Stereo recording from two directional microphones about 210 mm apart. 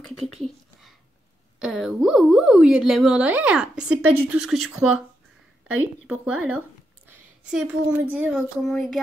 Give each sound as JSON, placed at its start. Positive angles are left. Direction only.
{"t": 0.2, "sound": "a sound", "side_deg": 0}
{"t": 1.6, "sound": "a woman's voice", "side_deg": 0}
{"t": 6.0, "sound": "a woman's voice", "side_deg": -5}